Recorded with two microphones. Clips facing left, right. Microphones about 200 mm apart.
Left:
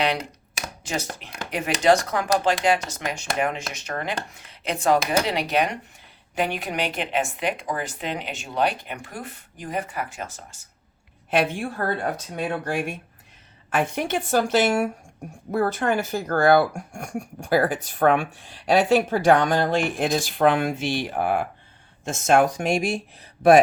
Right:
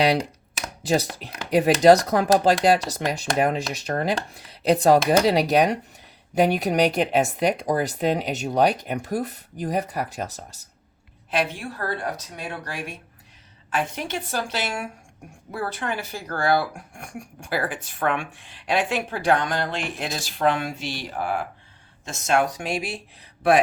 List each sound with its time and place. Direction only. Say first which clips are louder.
0.2 s chopping: right 4 dB; centre (ahead or behind)
0.8 s a woman's voice: right 8 dB; 35° right (ahead or behind)
11.3 s speech: left 3 dB; 50° left (ahead or behind)